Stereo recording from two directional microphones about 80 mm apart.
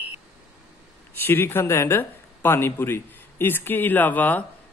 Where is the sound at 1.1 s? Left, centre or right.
Left.